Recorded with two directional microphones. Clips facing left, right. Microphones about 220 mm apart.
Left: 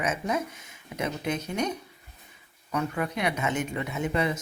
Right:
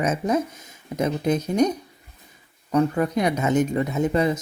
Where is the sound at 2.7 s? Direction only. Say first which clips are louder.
Right 9 dB; 40° right (ahead or behind).